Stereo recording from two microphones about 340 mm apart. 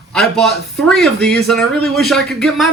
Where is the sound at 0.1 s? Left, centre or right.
Centre.